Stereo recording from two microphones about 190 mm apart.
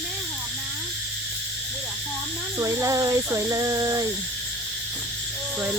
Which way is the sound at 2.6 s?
15° right (ahead or behind).